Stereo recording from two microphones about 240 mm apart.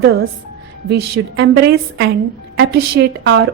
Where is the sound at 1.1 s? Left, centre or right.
Right.